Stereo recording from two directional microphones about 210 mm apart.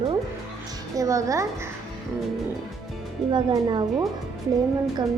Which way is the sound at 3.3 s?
20° right (ahead or behind).